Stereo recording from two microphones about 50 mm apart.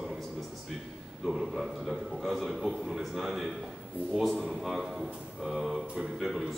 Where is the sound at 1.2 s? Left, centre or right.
Centre.